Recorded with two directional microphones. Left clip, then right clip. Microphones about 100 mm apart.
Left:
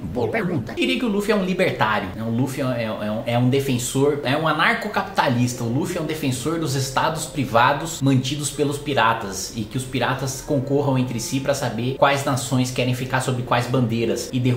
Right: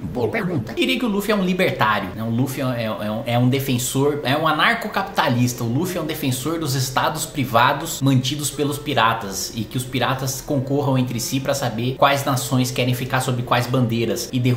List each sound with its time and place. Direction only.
0.2 s speech: 15° right (ahead or behind)
10.8 s speech: 20° right (ahead or behind)